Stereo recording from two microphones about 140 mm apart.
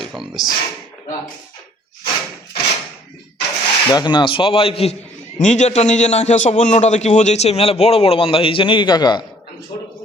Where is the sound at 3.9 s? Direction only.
30° left (ahead or behind).